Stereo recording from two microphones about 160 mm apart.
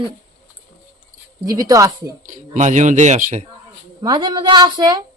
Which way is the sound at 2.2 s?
50° right (ahead or behind).